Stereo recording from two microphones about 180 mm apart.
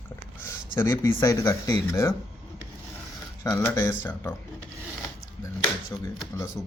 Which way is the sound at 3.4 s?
15° left (ahead or behind).